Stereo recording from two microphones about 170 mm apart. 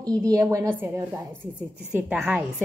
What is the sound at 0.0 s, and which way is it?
A woman's voice, 20° right (ahead or behind).